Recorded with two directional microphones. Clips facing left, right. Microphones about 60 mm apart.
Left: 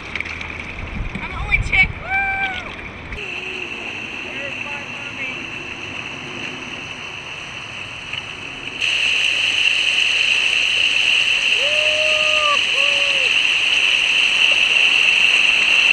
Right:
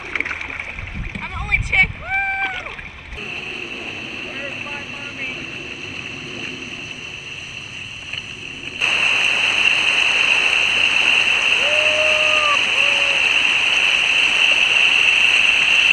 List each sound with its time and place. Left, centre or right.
0.1 s boat: right
1.2 s boat: centre
8.8 s a sound: right; by 15.9 s centre